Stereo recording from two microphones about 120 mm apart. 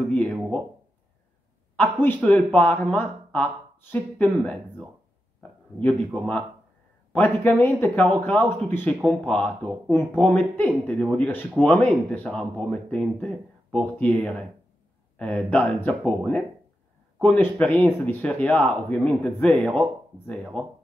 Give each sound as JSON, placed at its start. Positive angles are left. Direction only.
{"t": 0.1, "sound": "speech", "side_deg": 10}
{"t": 1.8, "sound": "speech", "side_deg": 15}
{"t": 5.8, "sound": "speech", "side_deg": 10}
{"t": 16.0, "sound": "speech", "side_deg": 0}
{"t": 17.2, "sound": "speech", "side_deg": 15}